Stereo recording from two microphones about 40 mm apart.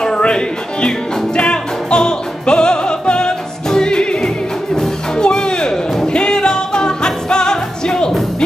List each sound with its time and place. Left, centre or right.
0.0 s music: left